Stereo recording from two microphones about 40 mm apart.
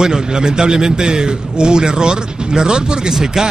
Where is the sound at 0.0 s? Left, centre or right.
Centre.